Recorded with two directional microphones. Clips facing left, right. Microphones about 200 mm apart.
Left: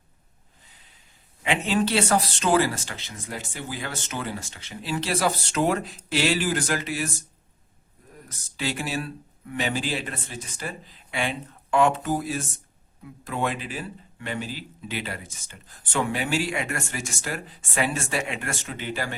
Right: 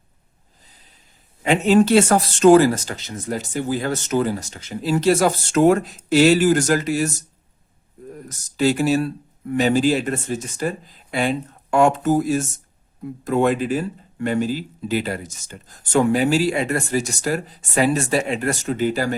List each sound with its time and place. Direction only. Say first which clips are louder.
1.4 s speech: right 9 dB; 45° right (ahead or behind)
8.3 s speech: right 11 dB; 40° right (ahead or behind)